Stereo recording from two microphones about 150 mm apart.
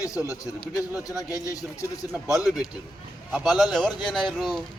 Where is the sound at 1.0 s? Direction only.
25° left (ahead or behind).